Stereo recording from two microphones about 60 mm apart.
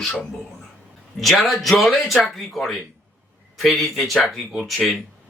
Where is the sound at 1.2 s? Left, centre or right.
Centre.